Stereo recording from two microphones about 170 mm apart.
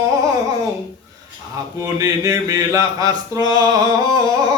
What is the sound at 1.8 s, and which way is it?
Mantra, 20° right (ahead or behind).